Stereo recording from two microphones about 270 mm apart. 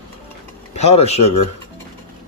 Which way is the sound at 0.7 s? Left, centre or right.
Left.